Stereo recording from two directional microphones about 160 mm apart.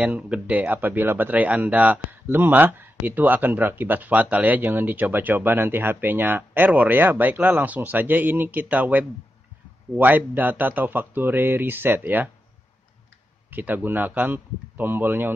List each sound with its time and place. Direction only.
0.0 s speech: 10° right (ahead or behind)
13.5 s speech: 10° right (ahead or behind)